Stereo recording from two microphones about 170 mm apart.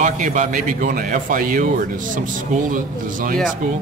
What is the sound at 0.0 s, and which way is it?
A man's voice, 50° right (ahead or behind).